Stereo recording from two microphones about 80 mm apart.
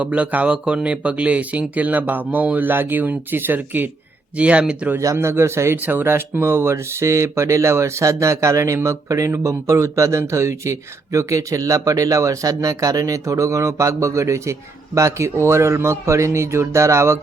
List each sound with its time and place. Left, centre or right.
0.0 s speech: centre
5.1 s speech: right